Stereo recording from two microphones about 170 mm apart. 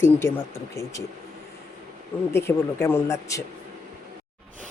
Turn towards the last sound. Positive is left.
turn(degrees=15)  # may be behind; listen again after turning